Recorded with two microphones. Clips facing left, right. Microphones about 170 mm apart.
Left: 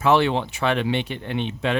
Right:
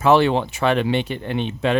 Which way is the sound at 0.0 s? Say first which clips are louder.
Right 3 dB; 40° right (ahead or behind).